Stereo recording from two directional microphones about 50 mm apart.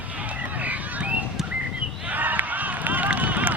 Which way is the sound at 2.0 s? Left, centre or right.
Right.